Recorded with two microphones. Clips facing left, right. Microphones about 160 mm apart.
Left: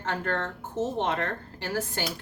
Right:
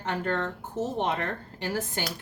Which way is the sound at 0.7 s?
20° left (ahead or behind).